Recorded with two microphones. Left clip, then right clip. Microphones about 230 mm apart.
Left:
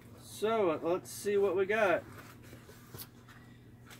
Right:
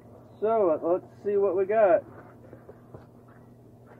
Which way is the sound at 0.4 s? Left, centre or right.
Left.